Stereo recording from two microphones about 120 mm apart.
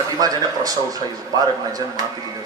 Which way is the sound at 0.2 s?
30° right (ahead or behind).